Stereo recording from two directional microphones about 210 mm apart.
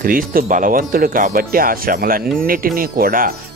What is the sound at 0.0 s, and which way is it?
Speech, 40° right (ahead or behind).